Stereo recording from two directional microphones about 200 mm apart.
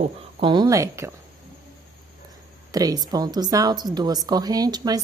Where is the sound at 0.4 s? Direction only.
25° right (ahead or behind).